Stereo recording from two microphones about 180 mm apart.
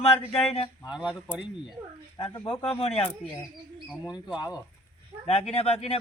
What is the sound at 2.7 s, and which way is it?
Speech, 35° left (ahead or behind).